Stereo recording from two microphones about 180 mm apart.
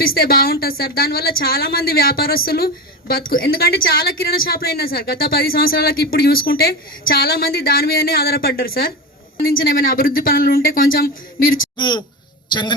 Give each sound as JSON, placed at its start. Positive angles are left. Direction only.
{"t": 0.0, "sound": "a woman's voice", "side_deg": 55}
{"t": 11.8, "sound": "speech", "side_deg": 25}